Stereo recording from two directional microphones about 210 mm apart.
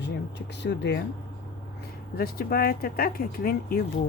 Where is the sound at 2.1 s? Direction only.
45° left (ahead or behind).